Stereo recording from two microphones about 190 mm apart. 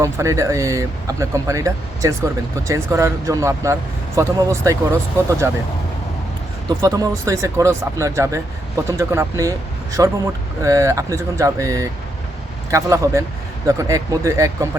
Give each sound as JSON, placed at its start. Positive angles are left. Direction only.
{"t": 0.0, "sound": "speech", "side_deg": -15}
{"t": 6.7, "sound": "speech", "side_deg": -20}